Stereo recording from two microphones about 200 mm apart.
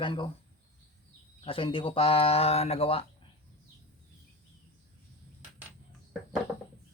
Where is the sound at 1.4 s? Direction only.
25° left (ahead or behind).